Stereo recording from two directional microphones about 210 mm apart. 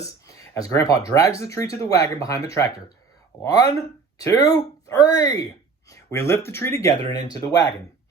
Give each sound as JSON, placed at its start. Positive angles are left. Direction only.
{"t": 0.5, "sound": "speech", "side_deg": 15}
{"t": 3.4, "sound": "speech", "side_deg": 15}